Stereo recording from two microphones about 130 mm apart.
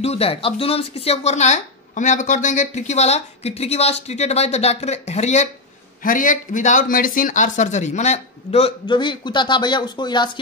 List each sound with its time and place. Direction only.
0.0 s speech: 50° left (ahead or behind)
6.0 s speech: 90° left; by 8.7 s 50° left (ahead or behind)
8.8 s speech: 35° left (ahead or behind)